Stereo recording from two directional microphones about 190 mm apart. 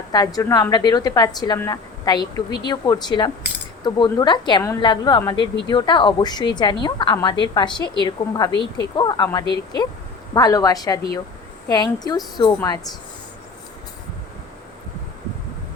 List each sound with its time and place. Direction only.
0.1 s a woman's voice: 20° left (ahead or behind)